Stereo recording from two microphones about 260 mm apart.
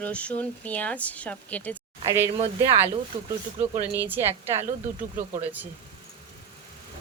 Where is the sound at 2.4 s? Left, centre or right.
Right.